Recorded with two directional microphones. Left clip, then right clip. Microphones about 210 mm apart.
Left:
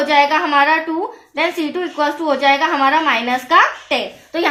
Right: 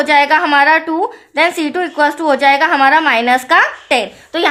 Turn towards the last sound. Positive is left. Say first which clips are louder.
# right 4 dB
turn(degrees=-45)  # may be behind; listen again after turning